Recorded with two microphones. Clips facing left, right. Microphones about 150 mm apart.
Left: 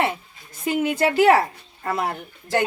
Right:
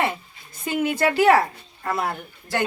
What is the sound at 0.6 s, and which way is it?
Speech, 15° left (ahead or behind).